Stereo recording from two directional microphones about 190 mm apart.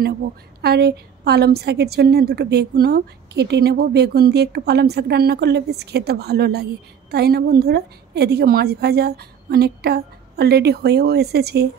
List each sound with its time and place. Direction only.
0.6 s a woman's voice: 60° right (ahead or behind)